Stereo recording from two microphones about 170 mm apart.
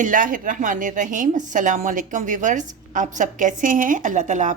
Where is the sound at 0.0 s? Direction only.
50° right (ahead or behind).